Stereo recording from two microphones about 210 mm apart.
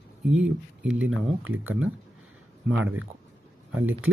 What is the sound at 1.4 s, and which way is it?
Speech, 75° right (ahead or behind).